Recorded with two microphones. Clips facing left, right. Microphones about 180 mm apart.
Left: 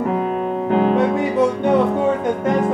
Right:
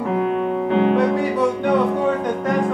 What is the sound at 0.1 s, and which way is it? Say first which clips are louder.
Music: right 1 dB; 40° left (ahead or behind).